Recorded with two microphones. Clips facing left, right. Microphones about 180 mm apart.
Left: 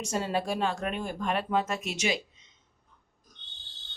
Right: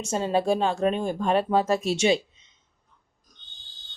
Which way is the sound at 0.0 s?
25° right (ahead or behind).